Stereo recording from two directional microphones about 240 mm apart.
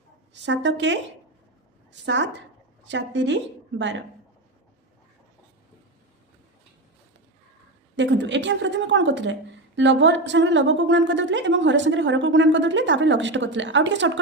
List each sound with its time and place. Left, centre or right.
0.4 s a woman's voice: right
7.9 s a woman's voice: right